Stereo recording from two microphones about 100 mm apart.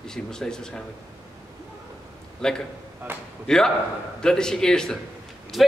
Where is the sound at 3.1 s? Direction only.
20° right (ahead or behind).